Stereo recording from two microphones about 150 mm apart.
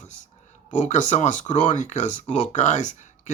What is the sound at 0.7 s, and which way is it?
Speech, 55° left (ahead or behind).